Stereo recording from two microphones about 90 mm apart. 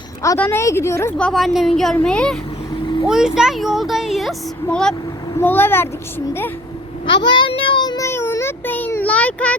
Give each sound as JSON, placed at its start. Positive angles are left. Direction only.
{"t": 0.3, "sound": "speech", "side_deg": 20}
{"t": 0.6, "sound": "a woman's voice", "side_deg": 30}
{"t": 1.3, "sound": "speech", "side_deg": 0}
{"t": 2.8, "sound": "vehicle", "side_deg": 55}
{"t": 3.1, "sound": "speech", "side_deg": -5}
{"t": 5.4, "sound": "a child's voice", "side_deg": 25}
{"t": 7.0, "sound": "a child's voice", "side_deg": 60}
{"t": 7.9, "sound": "a sound", "side_deg": 30}
{"t": 9.0, "sound": "a child's voice", "side_deg": 15}